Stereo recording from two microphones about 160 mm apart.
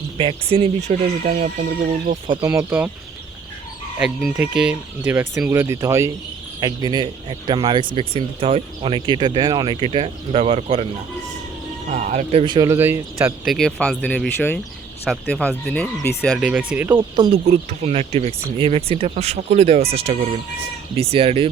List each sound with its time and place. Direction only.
0.2 s speech: 35° right (ahead or behind)
2.4 s speech: 20° right (ahead or behind)
3.9 s speech: 5° right (ahead or behind); by 10.8 s 40° right (ahead or behind)
11.9 s speech: 50° right (ahead or behind)
12.5 s speech: 15° right (ahead or behind)
13.4 s speech: centre (ahead or behind)
16.4 s speech: 5° right (ahead or behind)
16.9 s speech: 30° right (ahead or behind)
17.5 s speech: 40° right (ahead or behind)